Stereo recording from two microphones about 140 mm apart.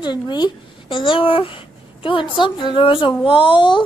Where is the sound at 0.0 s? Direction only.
30° left (ahead or behind).